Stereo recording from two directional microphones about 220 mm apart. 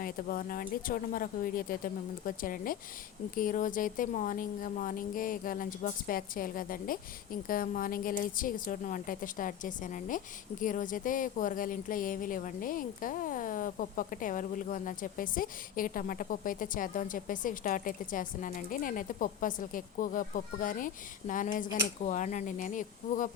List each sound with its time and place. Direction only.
0.0 s speech: 40° left (ahead or behind)